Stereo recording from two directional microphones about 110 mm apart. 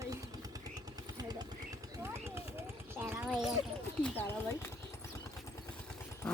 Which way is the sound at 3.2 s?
5° right (ahead or behind).